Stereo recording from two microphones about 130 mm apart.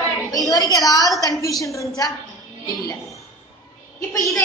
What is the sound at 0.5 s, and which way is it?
A woman's voice, 30° left (ahead or behind).